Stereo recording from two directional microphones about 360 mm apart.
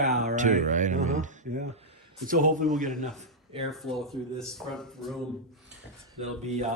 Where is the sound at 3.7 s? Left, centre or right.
Centre.